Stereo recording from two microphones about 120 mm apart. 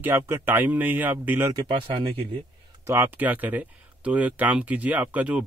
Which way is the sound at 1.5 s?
45° right (ahead or behind).